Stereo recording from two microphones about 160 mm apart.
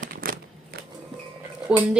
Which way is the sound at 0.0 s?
60° right (ahead or behind).